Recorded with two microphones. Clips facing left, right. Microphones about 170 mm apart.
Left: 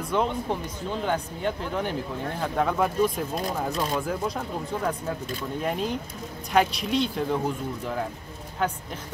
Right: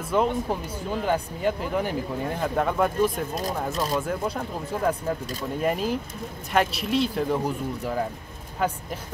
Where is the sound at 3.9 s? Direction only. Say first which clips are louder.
Right 1 dB; centre (ahead or behind).